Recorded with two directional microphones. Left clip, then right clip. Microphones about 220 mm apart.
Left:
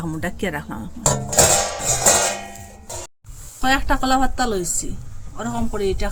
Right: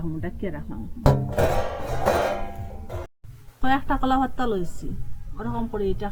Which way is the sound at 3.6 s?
25° left (ahead or behind).